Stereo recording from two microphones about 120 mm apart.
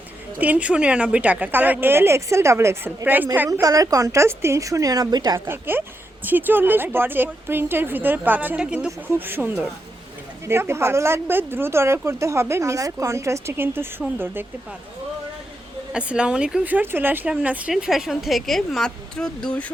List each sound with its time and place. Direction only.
0.3 s speech: 10° right (ahead or behind)
3.6 s speech: 30° right (ahead or behind)
5.5 s speech: 20° right (ahead or behind)
15.9 s speech: 10° right (ahead or behind); by 19.7 s 10° left (ahead or behind)